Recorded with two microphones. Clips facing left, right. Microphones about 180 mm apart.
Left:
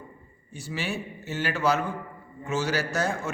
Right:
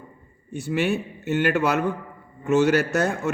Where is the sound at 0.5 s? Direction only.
60° right (ahead or behind).